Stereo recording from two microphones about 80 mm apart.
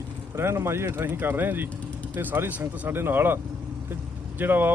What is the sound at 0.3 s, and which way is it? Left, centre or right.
Speech, right.